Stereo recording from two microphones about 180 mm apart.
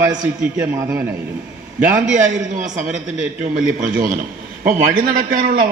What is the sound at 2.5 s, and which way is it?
A man's voice, 45° right (ahead or behind).